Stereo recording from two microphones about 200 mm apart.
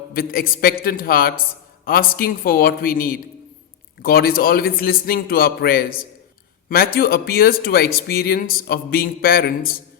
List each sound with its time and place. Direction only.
0.1 s a man's voice: 50° left (ahead or behind)